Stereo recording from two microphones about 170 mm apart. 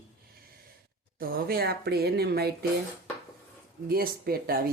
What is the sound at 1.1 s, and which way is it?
Speech, 60° right (ahead or behind).